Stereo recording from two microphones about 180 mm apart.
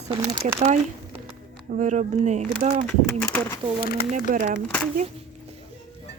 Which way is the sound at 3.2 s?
15° left (ahead or behind).